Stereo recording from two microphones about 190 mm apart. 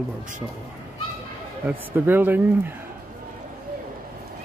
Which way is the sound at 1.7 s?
10° right (ahead or behind).